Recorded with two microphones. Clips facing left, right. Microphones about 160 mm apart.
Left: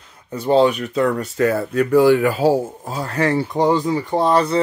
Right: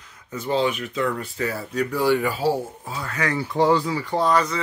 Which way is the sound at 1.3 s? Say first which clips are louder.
Left 8 dB; 55° left (ahead or behind).